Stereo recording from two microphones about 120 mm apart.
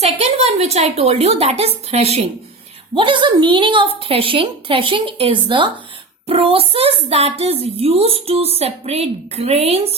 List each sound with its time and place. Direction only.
0.0 s a woman's voice: 60° right (ahead or behind)
2.9 s a woman's voice: 45° right (ahead or behind)